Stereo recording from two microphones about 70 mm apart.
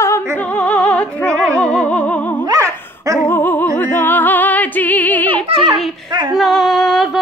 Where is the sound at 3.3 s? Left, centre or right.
Left.